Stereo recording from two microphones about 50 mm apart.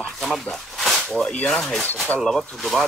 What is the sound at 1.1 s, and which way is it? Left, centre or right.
Speech, centre.